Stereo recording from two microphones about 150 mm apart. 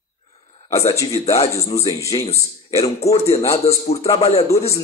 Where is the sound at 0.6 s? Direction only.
20° left (ahead or behind).